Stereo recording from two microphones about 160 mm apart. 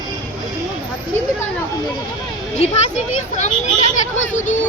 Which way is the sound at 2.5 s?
45° left (ahead or behind).